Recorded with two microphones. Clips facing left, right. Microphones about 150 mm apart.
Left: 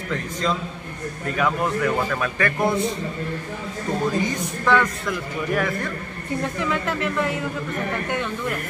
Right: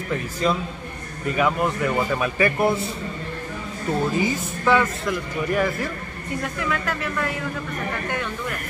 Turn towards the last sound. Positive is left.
turn(degrees=20)  # may be behind; listen again after turning